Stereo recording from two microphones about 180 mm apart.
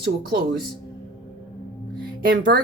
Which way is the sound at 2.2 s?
75° right (ahead or behind).